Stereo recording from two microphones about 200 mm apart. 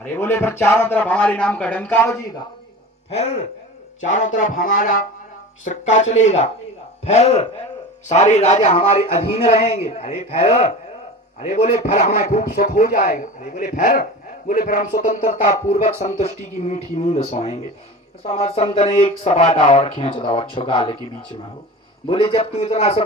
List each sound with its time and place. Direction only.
0.0 s speech: 10° left (ahead or behind)
3.1 s a man's voice: 35° left (ahead or behind)
4.7 s music: 45° left (ahead or behind)
5.6 s a man's voice: 35° left (ahead or behind)
22.1 s a man's voice: 25° left (ahead or behind)